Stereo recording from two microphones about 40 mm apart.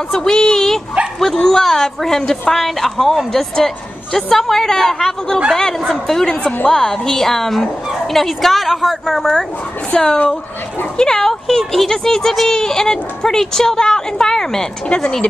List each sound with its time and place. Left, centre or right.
0.1 s a woman's voice: centre
6.2 s a woman's voice: left; by 9.3 s centre
9.9 s a woman's voice: left